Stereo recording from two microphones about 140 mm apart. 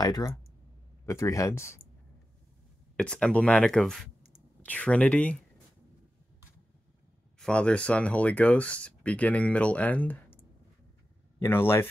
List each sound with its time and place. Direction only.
0.0 s speech: 25° left (ahead or behind)
3.0 s speech: 5° left (ahead or behind)
7.3 s speech: 5° left (ahead or behind)